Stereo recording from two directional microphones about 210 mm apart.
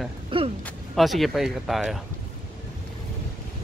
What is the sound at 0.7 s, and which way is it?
Speech, centre (ahead or behind).